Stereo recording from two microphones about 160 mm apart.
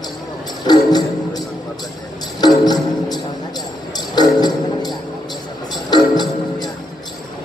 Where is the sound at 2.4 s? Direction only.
25° left (ahead or behind).